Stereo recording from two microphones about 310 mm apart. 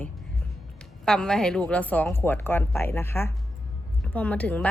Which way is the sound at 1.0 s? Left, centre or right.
Centre.